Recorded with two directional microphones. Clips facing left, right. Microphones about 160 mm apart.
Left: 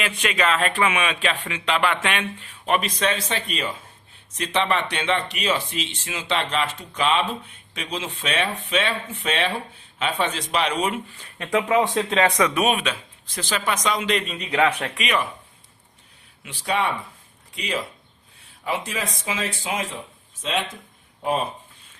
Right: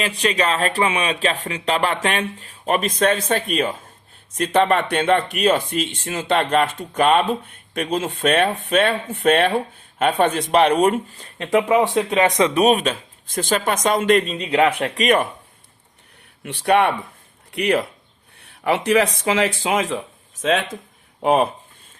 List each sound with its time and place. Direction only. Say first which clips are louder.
0.0 s speech: right 3 dB; 35° right (ahead or behind)
11.5 s speech: right 4 dB; 15° right (ahead or behind)
12.4 s speech: right 5 dB; 30° right (ahead or behind); by 14.3 s 50° right (ahead or behind)
14.3 s a man's voice: right 4 dB; 30° right (ahead or behind)
15.0 s speech: right 7 dB; 50° right (ahead or behind)
16.4 s speech: right 8 dB; 60° right (ahead or behind); by 20.0 s 90° right
21.2 s speech: right 7 dB; 70° right (ahead or behind)